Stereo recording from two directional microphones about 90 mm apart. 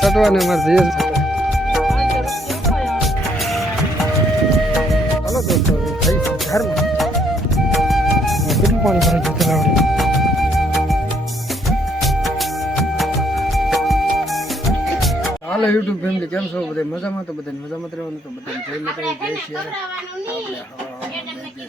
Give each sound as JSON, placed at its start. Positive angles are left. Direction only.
{"t": 0.0, "sound": "music", "side_deg": 0}
{"t": 5.3, "sound": "music", "side_deg": 0}
{"t": 6.6, "sound": "flute", "side_deg": 0}
{"t": 11.9, "sound": "music", "side_deg": 0}
{"t": 15.4, "sound": "a sound", "side_deg": 5}